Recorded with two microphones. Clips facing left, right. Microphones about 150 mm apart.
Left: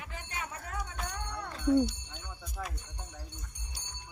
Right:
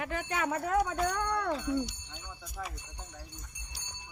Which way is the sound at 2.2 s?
Centre (ahead or behind).